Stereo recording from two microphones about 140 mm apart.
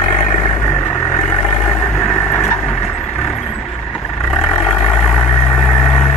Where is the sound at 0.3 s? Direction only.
25° left (ahead or behind); by 3.3 s 5° left (ahead or behind).